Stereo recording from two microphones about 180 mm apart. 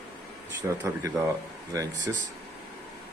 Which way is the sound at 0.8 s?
15° right (ahead or behind).